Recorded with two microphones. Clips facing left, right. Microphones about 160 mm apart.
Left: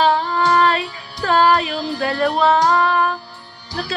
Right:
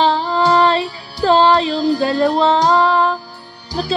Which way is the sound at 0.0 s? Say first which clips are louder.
Right 2 dB; 30° right (ahead or behind).